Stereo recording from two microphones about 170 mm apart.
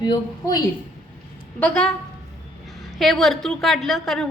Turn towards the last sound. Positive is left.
turn(degrees=0)  # may be behind; listen again after turning